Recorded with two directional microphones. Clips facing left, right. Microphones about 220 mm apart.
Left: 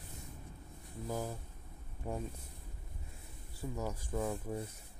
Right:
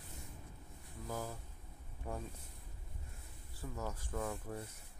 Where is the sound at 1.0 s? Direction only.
15° left (ahead or behind).